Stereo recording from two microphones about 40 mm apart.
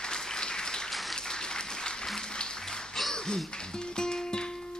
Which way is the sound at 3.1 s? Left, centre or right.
Centre.